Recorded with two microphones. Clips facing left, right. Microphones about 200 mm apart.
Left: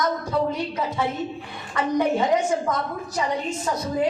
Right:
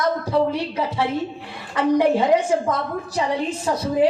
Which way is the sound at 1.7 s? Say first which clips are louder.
Right 4 dB; 30° right (ahead or behind).